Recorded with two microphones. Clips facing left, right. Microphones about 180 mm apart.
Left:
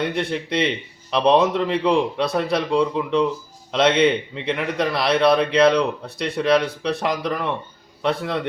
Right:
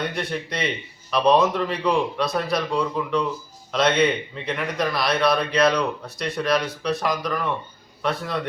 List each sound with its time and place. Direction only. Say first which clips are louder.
0.1 s speech: left 5 dB; 25° left (ahead or behind)